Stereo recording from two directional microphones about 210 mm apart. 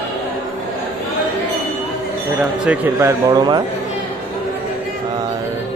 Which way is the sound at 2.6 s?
5° right (ahead or behind).